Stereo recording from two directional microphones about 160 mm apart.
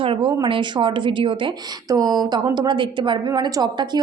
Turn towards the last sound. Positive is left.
turn(degrees=-25)  # may be behind; listen again after turning